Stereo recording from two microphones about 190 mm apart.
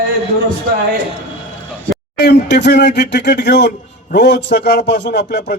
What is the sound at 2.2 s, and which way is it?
A man's voice, 65° left (ahead or behind).